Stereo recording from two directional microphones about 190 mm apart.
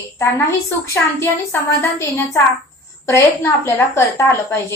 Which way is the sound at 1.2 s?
15° left (ahead or behind).